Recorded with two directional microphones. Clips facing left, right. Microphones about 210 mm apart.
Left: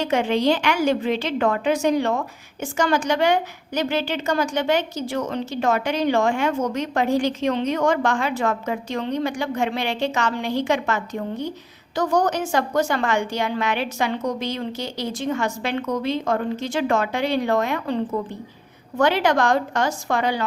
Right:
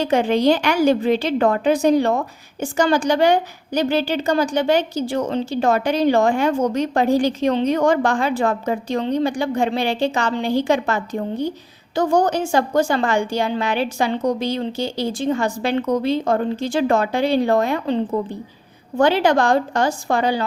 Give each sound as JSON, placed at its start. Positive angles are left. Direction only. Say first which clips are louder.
{"t": 0.0, "sound": "a woman's voice", "louder": "right 3 dB", "side_deg": -35}